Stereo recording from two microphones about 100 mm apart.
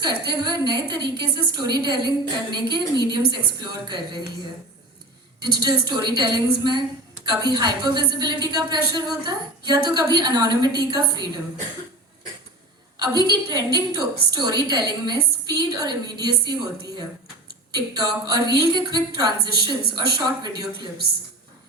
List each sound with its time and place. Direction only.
0.0 s a woman's voice: 45° right (ahead or behind)
5.4 s a woman's voice: 45° right (ahead or behind)
13.0 s a woman's voice: 45° right (ahead or behind)